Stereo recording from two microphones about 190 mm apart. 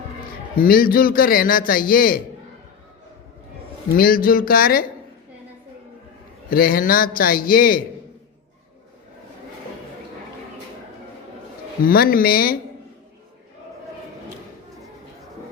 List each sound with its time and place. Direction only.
0.5 s a man's voice: 50° left (ahead or behind)
3.9 s a man's voice: 50° left (ahead or behind)
6.5 s a man's voice: 50° left (ahead or behind)
11.9 s a man's voice: 50° left (ahead or behind)